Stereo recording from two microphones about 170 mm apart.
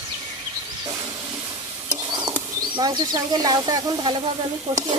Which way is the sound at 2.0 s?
25° right (ahead or behind).